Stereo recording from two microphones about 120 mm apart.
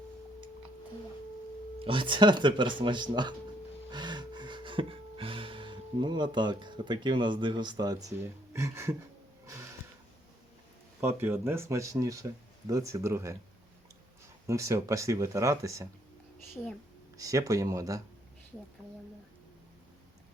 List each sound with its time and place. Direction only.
1.8 s speech: 45° right (ahead or behind)
3.9 s gasp: 40° right (ahead or behind)
8.2 s speech: 25° right (ahead or behind)
11.0 s speech: 20° right (ahead or behind)
14.4 s speech: 25° right (ahead or behind)
16.6 s speech: 5° left (ahead or behind)
17.2 s speech: 30° right (ahead or behind)